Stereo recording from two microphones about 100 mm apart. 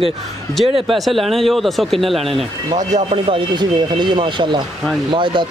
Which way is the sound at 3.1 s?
60° right (ahead or behind).